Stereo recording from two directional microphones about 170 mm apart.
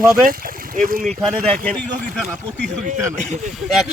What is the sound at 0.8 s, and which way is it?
Speech, 55° right (ahead or behind).